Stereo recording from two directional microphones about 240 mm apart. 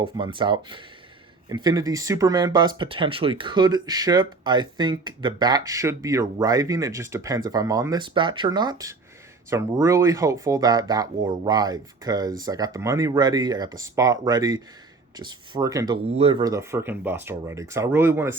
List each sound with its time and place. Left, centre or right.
0.2 s speech: centre
16.0 s speech: right